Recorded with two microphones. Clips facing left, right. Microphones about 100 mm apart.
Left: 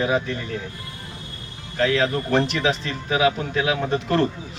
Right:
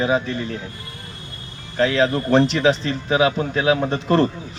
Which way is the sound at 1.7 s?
30° right (ahead or behind).